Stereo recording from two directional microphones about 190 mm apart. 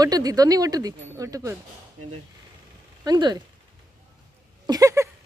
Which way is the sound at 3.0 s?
20° right (ahead or behind).